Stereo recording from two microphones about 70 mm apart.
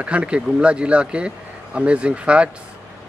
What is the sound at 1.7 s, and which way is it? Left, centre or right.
Speech, centre.